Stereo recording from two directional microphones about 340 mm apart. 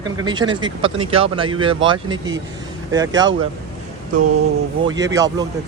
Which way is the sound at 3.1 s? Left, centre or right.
Right.